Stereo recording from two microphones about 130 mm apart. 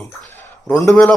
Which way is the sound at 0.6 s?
15° left (ahead or behind).